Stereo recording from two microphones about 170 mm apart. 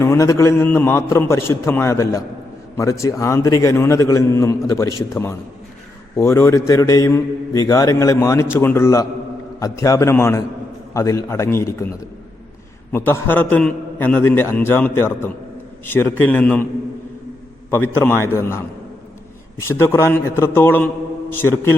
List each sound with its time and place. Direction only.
0.0 s a man's voice: 15° left (ahead or behind)
12.9 s a man's voice: 15° left (ahead or behind)
17.7 s a man's voice: 15° left (ahead or behind)